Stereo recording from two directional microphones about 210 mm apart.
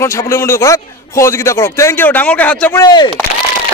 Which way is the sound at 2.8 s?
20° left (ahead or behind).